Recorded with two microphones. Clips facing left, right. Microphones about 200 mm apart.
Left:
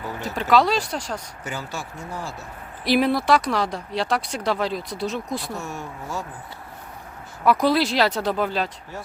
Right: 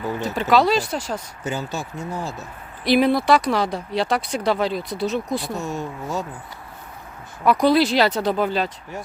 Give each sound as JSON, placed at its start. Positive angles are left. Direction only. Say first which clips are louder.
{"t": 0.5, "sound": "speech", "louder": "right 1 dB", "side_deg": 0}
{"t": 1.5, "sound": "speech", "louder": "right 5 dB", "side_deg": -20}
{"t": 2.8, "sound": "speech", "louder": "right 3 dB", "side_deg": 0}
{"t": 5.5, "sound": "speech", "louder": "right 5 dB", "side_deg": -20}
{"t": 7.4, "sound": "speech", "louder": "right 3 dB", "side_deg": 0}